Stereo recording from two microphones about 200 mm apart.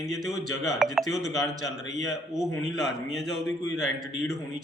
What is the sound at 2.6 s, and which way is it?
A man's voice, centre (ahead or behind).